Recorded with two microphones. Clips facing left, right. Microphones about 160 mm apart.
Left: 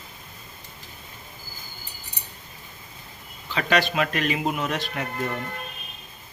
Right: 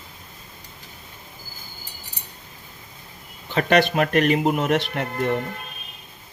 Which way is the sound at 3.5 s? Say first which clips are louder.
Right 5 dB; 55° right (ahead or behind).